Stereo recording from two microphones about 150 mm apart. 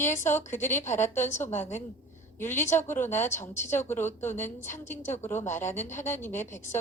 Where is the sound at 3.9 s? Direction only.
15° left (ahead or behind).